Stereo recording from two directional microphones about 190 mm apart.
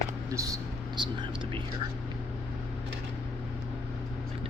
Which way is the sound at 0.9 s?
25° right (ahead or behind).